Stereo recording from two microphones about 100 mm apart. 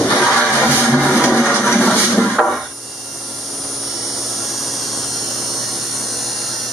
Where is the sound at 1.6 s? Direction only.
Centre (ahead or behind).